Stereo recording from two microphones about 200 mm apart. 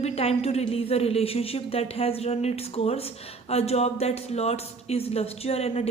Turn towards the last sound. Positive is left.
turn(degrees=30)  # may be behind; listen again after turning